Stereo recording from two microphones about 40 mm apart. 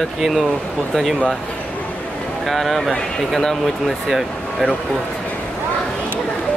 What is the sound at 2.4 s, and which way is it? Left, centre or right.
Speech, centre.